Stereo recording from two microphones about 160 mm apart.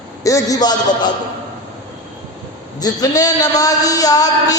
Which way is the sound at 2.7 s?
25° left (ahead or behind).